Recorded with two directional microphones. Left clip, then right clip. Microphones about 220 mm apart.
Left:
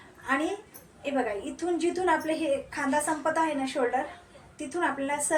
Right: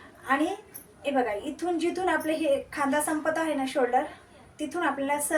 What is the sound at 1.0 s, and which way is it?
A woman's voice, 5° right (ahead or behind).